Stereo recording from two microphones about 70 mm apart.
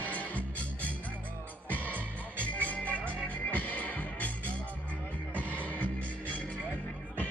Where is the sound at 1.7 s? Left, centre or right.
Right.